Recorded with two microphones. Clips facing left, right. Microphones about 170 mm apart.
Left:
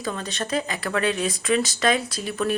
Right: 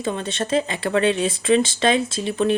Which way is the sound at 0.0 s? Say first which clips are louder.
Right 4 dB; 25° right (ahead or behind).